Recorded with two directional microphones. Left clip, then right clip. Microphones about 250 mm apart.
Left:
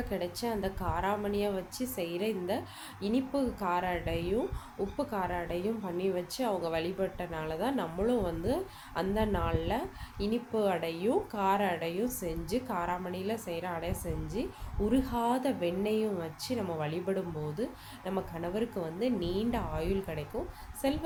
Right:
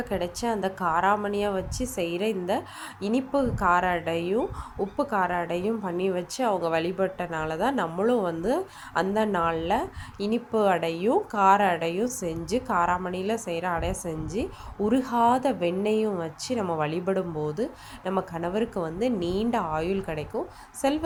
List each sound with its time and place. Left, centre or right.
0.1 s a woman's voice: centre